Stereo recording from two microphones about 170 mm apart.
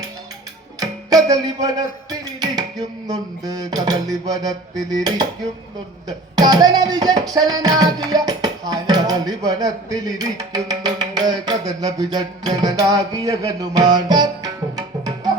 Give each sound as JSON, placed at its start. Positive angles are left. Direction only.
{"t": 0.8, "sound": "music", "side_deg": -20}